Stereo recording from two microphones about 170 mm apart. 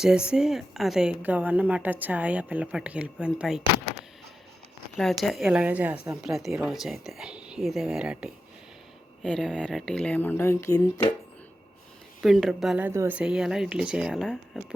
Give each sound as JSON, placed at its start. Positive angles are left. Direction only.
{"t": 0.0, "sound": "speech", "side_deg": -5}
{"t": 4.9, "sound": "a woman's voice", "side_deg": 0}
{"t": 12.2, "sound": "a woman's voice", "side_deg": 0}